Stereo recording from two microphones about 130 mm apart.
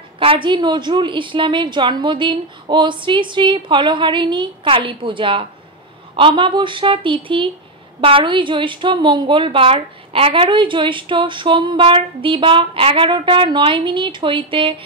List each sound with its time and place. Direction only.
0.2 s a woman's voice: 40° right (ahead or behind)